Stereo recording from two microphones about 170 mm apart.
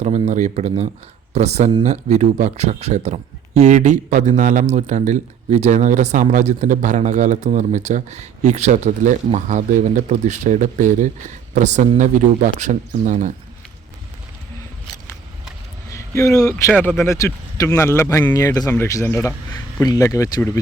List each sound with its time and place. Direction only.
0.0 s speech: 45° right (ahead or behind)
15.9 s speech: 15° left (ahead or behind)